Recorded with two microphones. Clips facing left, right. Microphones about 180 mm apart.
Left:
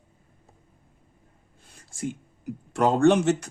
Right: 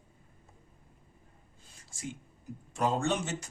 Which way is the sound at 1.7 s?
60° left (ahead or behind).